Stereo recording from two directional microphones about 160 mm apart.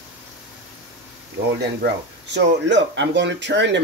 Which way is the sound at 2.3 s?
90° right.